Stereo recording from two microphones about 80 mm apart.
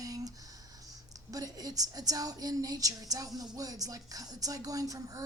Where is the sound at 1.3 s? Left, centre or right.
Right.